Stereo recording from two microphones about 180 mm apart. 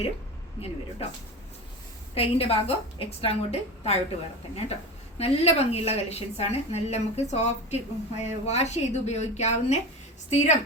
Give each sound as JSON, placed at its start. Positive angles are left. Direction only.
{"t": 2.1, "sound": "a woman's voice", "side_deg": 35}